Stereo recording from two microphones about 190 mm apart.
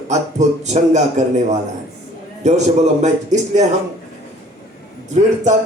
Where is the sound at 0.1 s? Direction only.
35° right (ahead or behind).